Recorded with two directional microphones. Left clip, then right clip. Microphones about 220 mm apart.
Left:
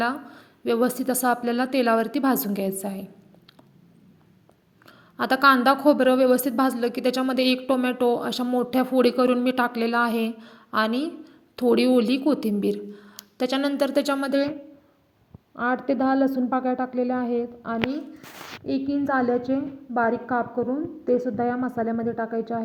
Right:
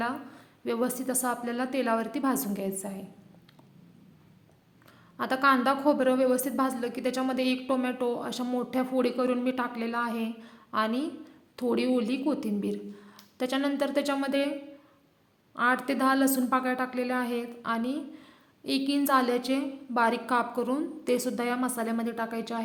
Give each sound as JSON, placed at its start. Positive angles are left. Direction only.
{"t": 0.0, "sound": "a woman's voice", "side_deg": 20}
{"t": 5.1, "sound": "a woman's voice", "side_deg": 20}
{"t": 15.5, "sound": "a woman's voice", "side_deg": 15}
{"t": 18.7, "sound": "a woman's voice", "side_deg": -10}